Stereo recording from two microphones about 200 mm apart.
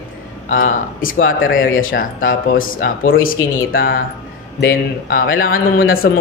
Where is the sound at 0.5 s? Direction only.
40° left (ahead or behind).